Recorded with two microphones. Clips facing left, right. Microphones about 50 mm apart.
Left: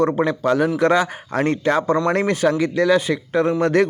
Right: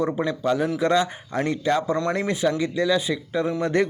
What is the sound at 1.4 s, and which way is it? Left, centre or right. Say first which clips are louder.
A man's voice: left 4 dB; left.